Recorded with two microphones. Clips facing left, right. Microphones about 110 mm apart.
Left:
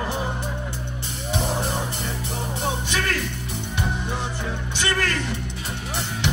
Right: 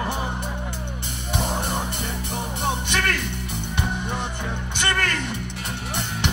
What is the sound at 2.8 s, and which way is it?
Music, 60° right (ahead or behind).